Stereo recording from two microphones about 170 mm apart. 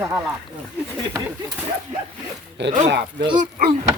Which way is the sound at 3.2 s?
25° right (ahead or behind).